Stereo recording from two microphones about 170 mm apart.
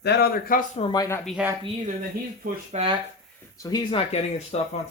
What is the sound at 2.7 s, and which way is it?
Speech, 35° right (ahead or behind).